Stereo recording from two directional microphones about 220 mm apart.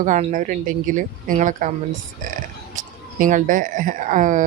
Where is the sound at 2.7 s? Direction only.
35° right (ahead or behind).